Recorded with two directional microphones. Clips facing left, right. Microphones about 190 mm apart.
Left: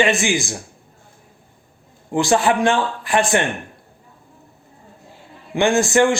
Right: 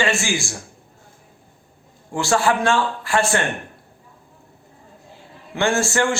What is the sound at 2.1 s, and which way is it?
A man's voice, 15° left (ahead or behind).